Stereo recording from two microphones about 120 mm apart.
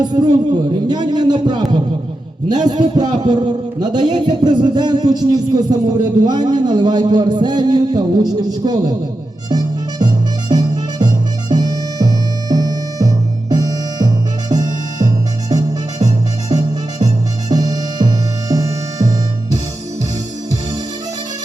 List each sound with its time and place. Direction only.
0.0 s a man's voice: 35° right (ahead or behind)
2.6 s speech: 35° right (ahead or behind)
9.5 s harmonica: 35° right (ahead or behind)
14.5 s music: 30° right (ahead or behind)